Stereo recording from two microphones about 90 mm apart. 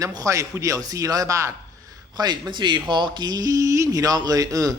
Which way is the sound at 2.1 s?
50° right (ahead or behind).